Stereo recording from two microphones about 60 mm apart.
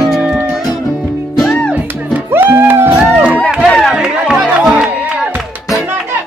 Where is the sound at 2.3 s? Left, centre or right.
Right.